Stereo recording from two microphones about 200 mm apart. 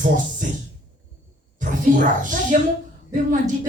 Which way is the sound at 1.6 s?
40° right (ahead or behind).